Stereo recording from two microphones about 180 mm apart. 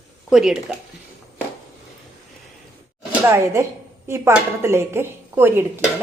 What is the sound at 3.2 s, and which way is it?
A woman's voice, 15° right (ahead or behind).